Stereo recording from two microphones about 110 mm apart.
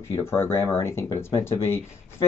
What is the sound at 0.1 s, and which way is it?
Speech, 25° left (ahead or behind).